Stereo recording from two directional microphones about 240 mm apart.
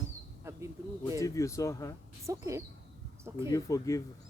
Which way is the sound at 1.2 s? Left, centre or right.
Centre.